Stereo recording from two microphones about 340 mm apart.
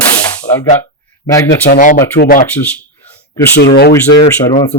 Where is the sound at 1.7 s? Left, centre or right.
Left.